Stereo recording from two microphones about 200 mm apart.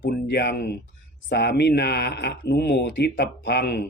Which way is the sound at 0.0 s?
55° left (ahead or behind).